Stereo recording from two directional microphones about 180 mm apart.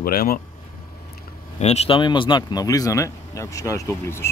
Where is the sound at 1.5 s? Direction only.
35° left (ahead or behind).